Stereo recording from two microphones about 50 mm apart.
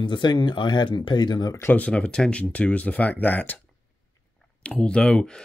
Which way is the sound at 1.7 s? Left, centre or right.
Left.